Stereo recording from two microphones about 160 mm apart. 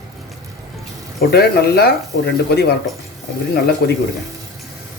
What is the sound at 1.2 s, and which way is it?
Speech, 80° left.